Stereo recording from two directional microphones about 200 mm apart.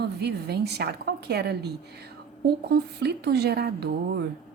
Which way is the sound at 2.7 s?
55° right (ahead or behind).